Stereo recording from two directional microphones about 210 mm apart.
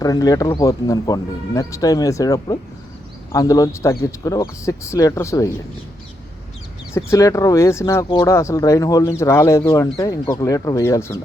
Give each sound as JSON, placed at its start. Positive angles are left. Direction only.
{"t": 0.0, "sound": "speech", "side_deg": 15}
{"t": 6.9, "sound": "speech", "side_deg": 15}